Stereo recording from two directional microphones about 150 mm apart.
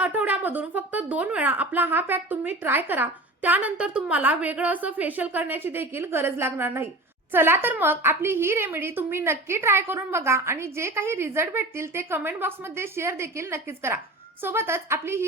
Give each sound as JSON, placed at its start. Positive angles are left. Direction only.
{"t": 0.0, "sound": "speech", "side_deg": -10}